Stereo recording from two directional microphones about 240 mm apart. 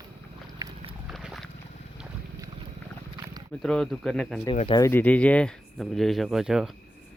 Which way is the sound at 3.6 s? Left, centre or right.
Centre.